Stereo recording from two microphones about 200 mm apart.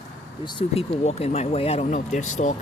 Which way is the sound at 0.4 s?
30° left (ahead or behind).